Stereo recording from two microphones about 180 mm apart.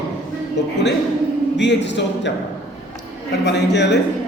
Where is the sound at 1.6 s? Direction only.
75° left (ahead or behind).